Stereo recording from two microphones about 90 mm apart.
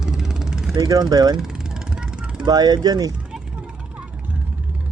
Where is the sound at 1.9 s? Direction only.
10° right (ahead or behind).